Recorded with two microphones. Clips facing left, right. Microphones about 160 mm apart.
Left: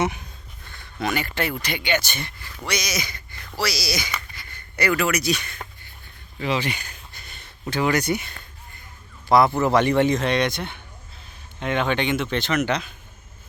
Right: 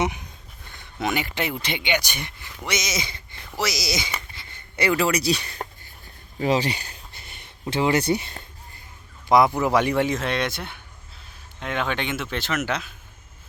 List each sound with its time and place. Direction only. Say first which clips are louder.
0.0 s speech: left 1 dB; 15° right (ahead or behind)
9.3 s speech: left 1 dB; 15° right (ahead or behind)